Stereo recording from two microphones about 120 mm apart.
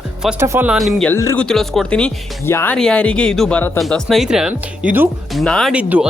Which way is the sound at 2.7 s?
5° left (ahead or behind).